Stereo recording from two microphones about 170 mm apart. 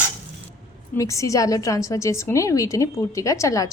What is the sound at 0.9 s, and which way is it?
Speech, 20° left (ahead or behind).